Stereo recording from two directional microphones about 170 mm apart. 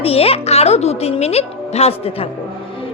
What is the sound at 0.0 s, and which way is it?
A woman's voice, 35° left (ahead or behind).